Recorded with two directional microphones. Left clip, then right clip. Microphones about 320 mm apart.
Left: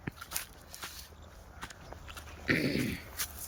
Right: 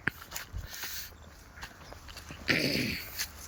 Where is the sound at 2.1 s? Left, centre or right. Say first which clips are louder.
Right 2 dB; centre.